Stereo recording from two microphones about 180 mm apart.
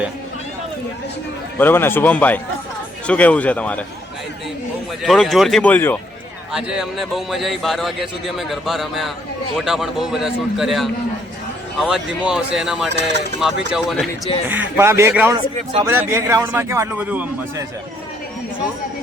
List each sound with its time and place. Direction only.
1.5 s a man's voice: 10° left (ahead or behind)
5.0 s a man's voice: centre (ahead or behind)
6.5 s a man's voice: 5° right (ahead or behind)
12.9 s speech: 75° right (ahead or behind)
13.4 s a man's voice: centre (ahead or behind)
14.5 s a man's voice: 10° right (ahead or behind)